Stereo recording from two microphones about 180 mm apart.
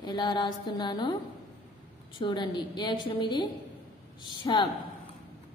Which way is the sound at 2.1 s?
25° left (ahead or behind).